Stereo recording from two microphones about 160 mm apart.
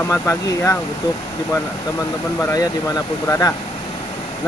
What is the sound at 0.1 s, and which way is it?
Speech, 20° left (ahead or behind).